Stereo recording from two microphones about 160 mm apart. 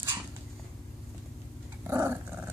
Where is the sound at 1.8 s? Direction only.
15° right (ahead or behind).